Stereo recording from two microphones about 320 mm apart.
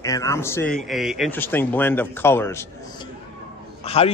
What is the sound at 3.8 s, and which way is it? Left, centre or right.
Speech, centre.